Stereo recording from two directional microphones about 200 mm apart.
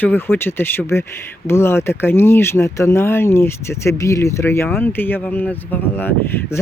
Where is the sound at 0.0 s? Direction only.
10° left (ahead or behind).